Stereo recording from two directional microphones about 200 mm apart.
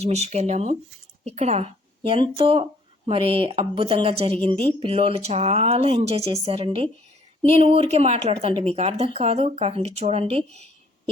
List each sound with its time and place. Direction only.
0.0 s a woman's voice: 35° right (ahead or behind)